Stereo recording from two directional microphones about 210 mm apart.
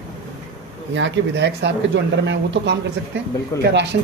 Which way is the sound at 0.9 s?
55° right (ahead or behind).